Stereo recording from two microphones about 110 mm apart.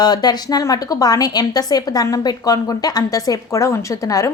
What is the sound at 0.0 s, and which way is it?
A woman's voice, 40° left (ahead or behind).